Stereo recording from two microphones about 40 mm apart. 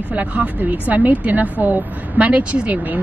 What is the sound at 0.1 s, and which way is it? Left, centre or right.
Speech, right.